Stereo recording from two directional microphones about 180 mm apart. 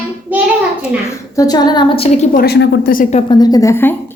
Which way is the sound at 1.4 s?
20° left (ahead or behind).